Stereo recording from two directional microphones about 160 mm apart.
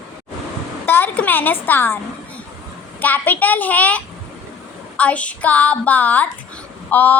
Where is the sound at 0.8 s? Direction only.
10° left (ahead or behind).